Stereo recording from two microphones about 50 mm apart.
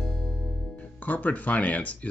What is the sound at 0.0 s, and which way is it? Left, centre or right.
Music, centre.